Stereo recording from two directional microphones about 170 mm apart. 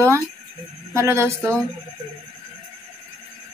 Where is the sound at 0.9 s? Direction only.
15° right (ahead or behind).